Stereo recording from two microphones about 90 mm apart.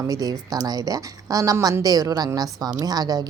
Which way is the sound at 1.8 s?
45° right (ahead or behind).